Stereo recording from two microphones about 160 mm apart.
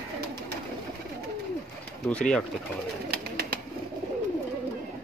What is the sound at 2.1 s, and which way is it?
Speech, 5° left (ahead or behind).